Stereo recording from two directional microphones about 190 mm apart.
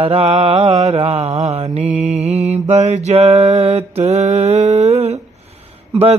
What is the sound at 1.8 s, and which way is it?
Mantra, 5° right (ahead or behind).